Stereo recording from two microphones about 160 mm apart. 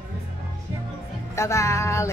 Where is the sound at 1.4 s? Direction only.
20° left (ahead or behind).